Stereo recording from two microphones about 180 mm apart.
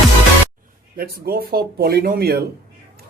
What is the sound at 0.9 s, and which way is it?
Speech, 60° right (ahead or behind).